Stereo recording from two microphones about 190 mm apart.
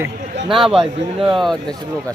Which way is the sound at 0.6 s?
Centre (ahead or behind).